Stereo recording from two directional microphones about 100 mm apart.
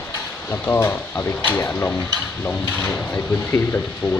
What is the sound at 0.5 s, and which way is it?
Speech, 25° left (ahead or behind).